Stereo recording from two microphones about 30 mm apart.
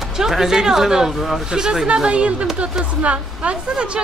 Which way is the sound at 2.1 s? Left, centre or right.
Right.